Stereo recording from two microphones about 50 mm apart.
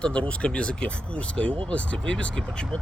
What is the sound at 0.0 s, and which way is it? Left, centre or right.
Speech, left.